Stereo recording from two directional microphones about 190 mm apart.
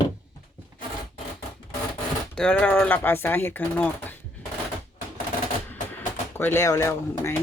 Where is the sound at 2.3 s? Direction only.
5° left (ahead or behind).